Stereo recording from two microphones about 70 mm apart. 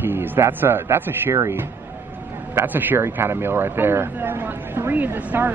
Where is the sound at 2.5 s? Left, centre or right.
Right.